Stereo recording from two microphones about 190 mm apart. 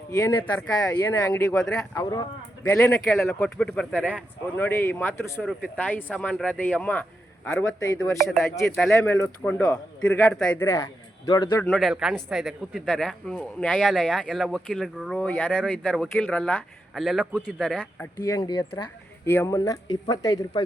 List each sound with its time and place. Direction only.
0.3 s speech: 15° left (ahead or behind)
11.6 s a man's voice: centre (ahead or behind)
18.0 s speech: 20° left (ahead or behind)
19.2 s speech: 10° left (ahead or behind)